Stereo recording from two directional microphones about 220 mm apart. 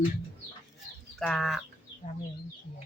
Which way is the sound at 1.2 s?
Centre (ahead or behind).